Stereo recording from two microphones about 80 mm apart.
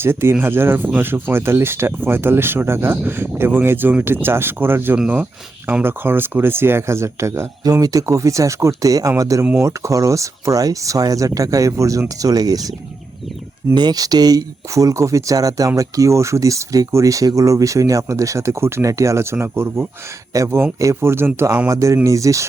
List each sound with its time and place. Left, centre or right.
0.0 s speech: right
4.9 s speech: centre; by 7.4 s right
7.6 s speech: right
13.7 s speech: right